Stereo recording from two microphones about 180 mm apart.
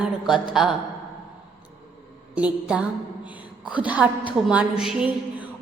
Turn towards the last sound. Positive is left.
turn(degrees=-5)  # may be behind; listen again after turning